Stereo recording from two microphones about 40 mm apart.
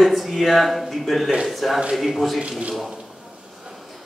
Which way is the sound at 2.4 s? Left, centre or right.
Right.